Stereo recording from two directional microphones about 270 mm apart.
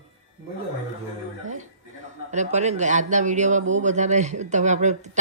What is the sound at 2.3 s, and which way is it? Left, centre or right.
A man's voice, right.